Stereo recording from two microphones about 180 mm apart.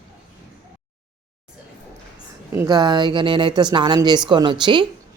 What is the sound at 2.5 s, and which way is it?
Speech, 20° right (ahead or behind).